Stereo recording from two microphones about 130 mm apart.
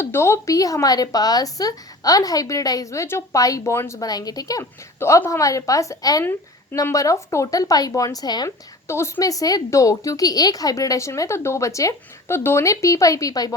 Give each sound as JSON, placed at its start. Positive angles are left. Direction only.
{"t": 0.0, "sound": "speech", "side_deg": 20}
{"t": 6.2, "sound": "speech", "side_deg": 15}
{"t": 8.9, "sound": "speech", "side_deg": 20}